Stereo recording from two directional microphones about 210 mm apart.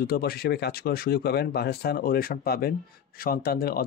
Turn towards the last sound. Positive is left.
turn(degrees=45)  # may be behind; listen again after turning